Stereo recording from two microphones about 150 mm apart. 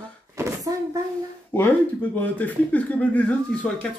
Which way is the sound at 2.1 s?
10° left (ahead or behind).